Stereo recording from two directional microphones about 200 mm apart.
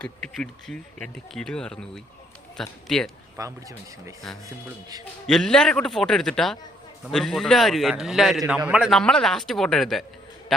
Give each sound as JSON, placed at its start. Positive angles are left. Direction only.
{"t": 0.0, "sound": "a man's voice", "side_deg": 5}
{"t": 3.3, "sound": "speech", "side_deg": -15}
{"t": 5.2, "sound": "a man's voice", "side_deg": 0}